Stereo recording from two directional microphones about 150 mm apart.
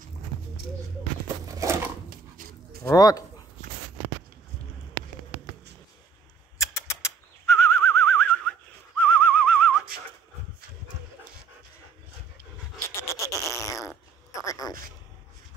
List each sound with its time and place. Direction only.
1.4 s a sound: 20° right (ahead or behind)
2.0 s dog: 65° right (ahead or behind)
2.8 s speech: 25° left (ahead or behind)
6.6 s bird flight: 20° left (ahead or behind)
13.1 s fart: 20° left (ahead or behind)
14.4 s a sound: 25° left (ahead or behind)